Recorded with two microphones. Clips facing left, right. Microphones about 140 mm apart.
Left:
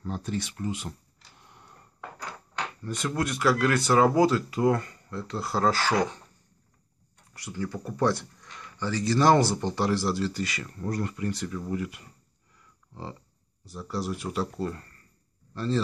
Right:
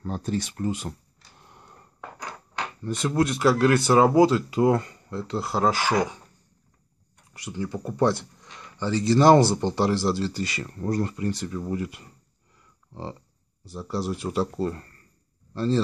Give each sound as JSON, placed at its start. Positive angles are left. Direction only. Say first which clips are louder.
{"t": 0.0, "sound": "speech", "louder": "right 3 dB", "side_deg": -40}
{"t": 2.8, "sound": "speech", "louder": "right 6 dB", "side_deg": -25}
{"t": 7.3, "sound": "speech", "louder": "right 2 dB", "side_deg": -20}
{"t": 13.7, "sound": "speech", "louder": "right 3 dB", "side_deg": -25}